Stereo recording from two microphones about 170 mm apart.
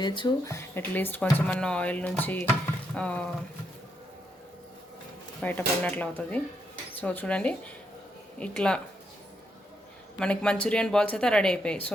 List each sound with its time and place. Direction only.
0.0 s speech: 25° left (ahead or behind)
0.4 s speech: 15° left (ahead or behind)
5.4 s speech: 10° left (ahead or behind)
10.2 s speech: 5° left (ahead or behind)